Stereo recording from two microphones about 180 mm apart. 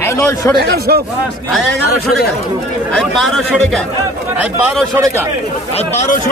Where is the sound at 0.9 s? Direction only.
55° right (ahead or behind).